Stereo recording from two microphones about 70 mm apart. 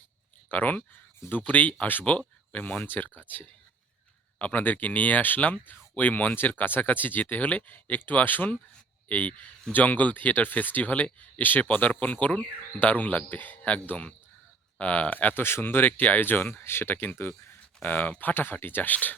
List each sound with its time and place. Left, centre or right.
0.4 s speech: left